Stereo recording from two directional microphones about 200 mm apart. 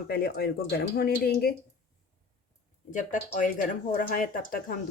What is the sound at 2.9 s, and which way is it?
Speech, 40° left (ahead or behind).